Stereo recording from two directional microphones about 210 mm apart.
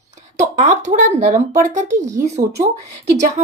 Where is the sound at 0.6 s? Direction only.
35° right (ahead or behind).